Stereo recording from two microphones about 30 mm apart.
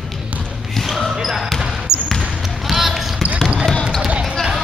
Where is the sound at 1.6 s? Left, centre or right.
Right.